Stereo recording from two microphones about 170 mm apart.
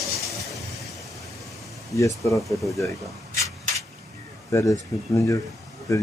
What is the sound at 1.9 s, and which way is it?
Speech, 20° left (ahead or behind).